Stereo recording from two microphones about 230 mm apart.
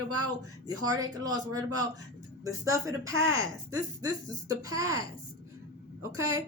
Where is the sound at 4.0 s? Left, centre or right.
Centre.